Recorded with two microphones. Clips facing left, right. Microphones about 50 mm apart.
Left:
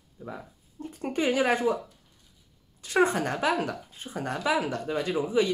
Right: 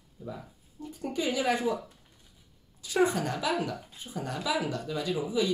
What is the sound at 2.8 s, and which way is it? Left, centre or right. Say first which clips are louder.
Speech: left 2 dB; left.